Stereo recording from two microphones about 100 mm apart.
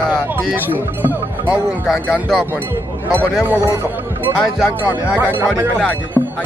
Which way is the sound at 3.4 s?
20° right (ahead or behind).